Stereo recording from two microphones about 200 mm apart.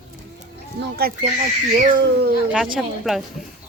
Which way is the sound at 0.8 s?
55° right (ahead or behind).